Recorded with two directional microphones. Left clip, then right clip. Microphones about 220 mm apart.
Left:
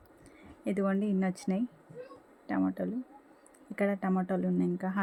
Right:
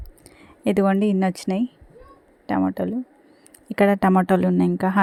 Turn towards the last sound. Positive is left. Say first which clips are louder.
# right 12 dB
turn(degrees=-40)  # may be behind; listen again after turning